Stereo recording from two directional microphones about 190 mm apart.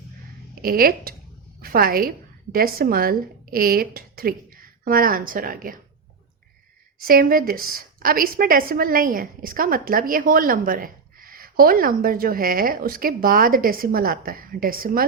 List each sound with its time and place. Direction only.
0.5 s a woman's voice: 50° right (ahead or behind)
7.0 s a woman's voice: 50° right (ahead or behind)